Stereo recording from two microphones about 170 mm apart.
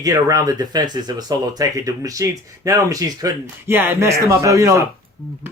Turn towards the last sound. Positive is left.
turn(degrees=-20)  # may be behind; listen again after turning